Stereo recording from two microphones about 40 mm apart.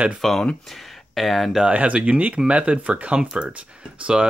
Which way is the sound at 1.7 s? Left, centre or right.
Right.